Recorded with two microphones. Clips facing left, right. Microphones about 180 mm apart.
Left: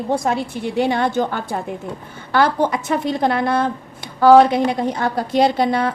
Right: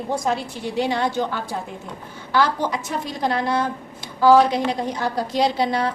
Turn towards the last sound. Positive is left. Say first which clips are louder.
# left 4 dB
turn(degrees=55)  # may be behind; listen again after turning